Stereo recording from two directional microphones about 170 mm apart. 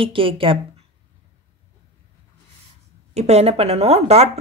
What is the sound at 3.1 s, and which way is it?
Speech, 40° right (ahead or behind).